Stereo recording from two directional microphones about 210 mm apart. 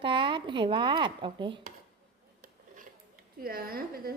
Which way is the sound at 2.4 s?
40° right (ahead or behind).